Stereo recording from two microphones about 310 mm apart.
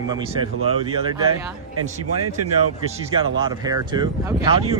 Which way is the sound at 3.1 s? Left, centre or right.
Centre.